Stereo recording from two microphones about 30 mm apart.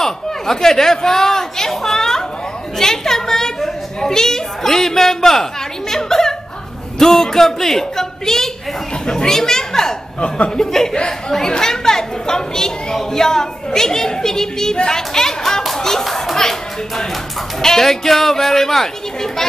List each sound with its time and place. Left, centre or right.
0.0 s a woman's voice: centre
10.2 s speech: left
10.6 s a woman's voice: centre
16.3 s a woman's voice: centre